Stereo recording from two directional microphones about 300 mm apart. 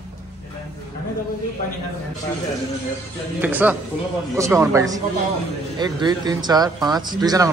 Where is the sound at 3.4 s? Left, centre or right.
Centre.